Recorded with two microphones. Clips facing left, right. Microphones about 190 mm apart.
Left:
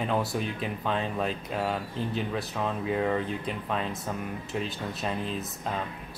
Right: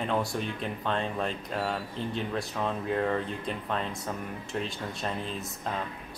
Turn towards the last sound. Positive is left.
turn(degrees=5)  # may be behind; listen again after turning